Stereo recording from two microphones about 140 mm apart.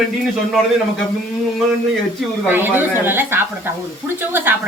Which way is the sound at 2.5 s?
15° right (ahead or behind).